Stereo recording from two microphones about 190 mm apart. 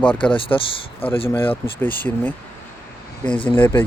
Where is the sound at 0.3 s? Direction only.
25° left (ahead or behind).